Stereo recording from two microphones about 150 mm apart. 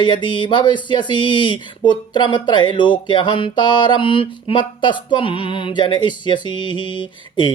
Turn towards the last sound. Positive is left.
turn(degrees=30)  # may be behind; listen again after turning